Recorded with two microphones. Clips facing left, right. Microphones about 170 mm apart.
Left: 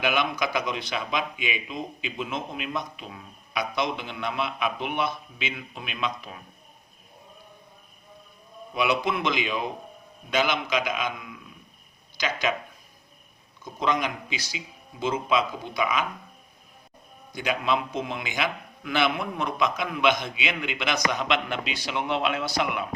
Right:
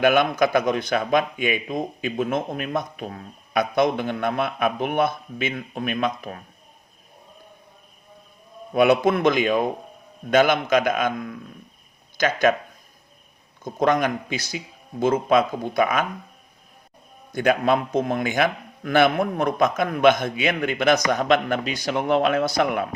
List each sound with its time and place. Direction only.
0.0 s speech: 50° right (ahead or behind)
8.7 s speech: 50° right (ahead or behind)
13.7 s speech: 50° right (ahead or behind)
17.3 s speech: 50° right (ahead or behind)